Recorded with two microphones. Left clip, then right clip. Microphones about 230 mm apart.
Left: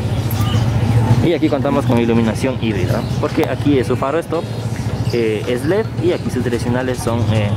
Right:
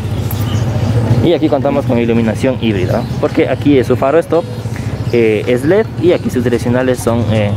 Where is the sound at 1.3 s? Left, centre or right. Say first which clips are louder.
Right 5 dB; centre.